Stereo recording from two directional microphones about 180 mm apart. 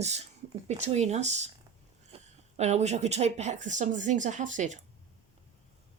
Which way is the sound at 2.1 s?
30° right (ahead or behind).